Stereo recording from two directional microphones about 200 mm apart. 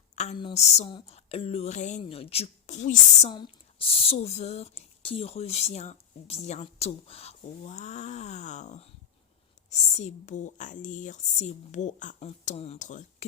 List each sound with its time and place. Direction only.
0.2 s speech: 30° left (ahead or behind)